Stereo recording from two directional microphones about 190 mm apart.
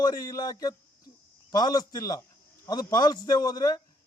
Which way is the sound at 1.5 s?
20° left (ahead or behind).